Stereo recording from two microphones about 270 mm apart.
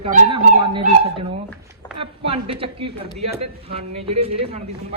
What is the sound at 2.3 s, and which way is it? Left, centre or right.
Speech, centre.